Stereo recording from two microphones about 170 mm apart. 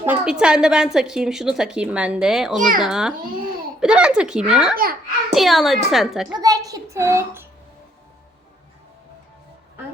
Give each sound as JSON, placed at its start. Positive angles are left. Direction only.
{"t": 0.0, "sound": "a woman's voice", "side_deg": -5}
{"t": 2.6, "sound": "a child's voice", "side_deg": -50}
{"t": 2.8, "sound": "a woman's voice", "side_deg": -5}
{"t": 6.3, "sound": "a child's voice", "side_deg": -20}